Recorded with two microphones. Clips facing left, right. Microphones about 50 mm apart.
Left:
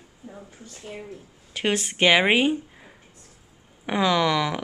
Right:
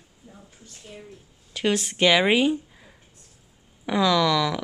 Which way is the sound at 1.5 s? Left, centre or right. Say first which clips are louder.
Right 1 dB; centre.